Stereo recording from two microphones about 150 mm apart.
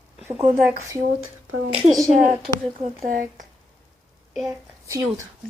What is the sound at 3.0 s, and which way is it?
Speech, 60° right (ahead or behind).